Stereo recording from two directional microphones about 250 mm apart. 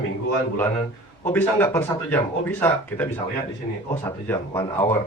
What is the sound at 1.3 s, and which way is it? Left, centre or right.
Speech, centre.